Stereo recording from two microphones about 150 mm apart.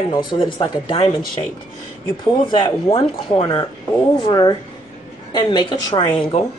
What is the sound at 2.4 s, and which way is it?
Speech, 35° left (ahead or behind).